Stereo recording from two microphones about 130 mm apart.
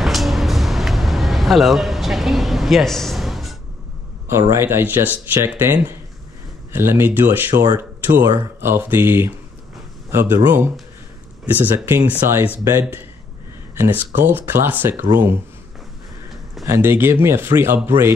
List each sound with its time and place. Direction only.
0.0 s vehicle: centre (ahead or behind)
4.3 s speech: 20° right (ahead or behind)
16.6 s speech: 20° right (ahead or behind)